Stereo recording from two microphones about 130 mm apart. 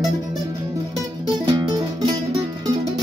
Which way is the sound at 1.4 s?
30° right (ahead or behind).